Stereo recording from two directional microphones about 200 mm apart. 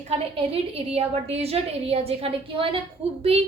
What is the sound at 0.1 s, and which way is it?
A woman's voice, 30° right (ahead or behind).